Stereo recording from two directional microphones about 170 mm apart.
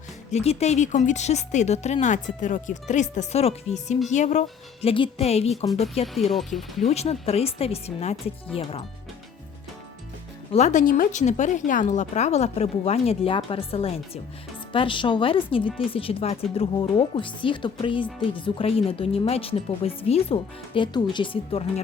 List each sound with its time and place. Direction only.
0.3 s speech: 40° left (ahead or behind)
4.8 s speech: 30° left (ahead or behind)
6.3 s speech: centre (ahead or behind)
6.8 s speech: 40° left (ahead or behind)
10.5 s speech: 45° left (ahead or behind)